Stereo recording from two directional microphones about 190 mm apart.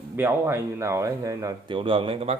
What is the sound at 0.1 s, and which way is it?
Speech, 10° right (ahead or behind).